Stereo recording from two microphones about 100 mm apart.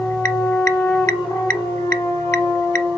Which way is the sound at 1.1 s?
30° left (ahead or behind).